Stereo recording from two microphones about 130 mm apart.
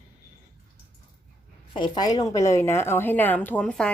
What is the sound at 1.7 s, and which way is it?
A woman's voice, 35° left (ahead or behind).